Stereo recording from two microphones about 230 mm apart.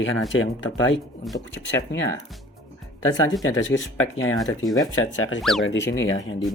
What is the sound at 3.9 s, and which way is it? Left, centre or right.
Speech, left.